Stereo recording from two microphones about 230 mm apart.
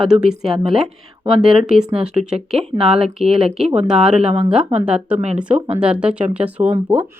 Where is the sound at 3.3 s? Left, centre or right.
Centre.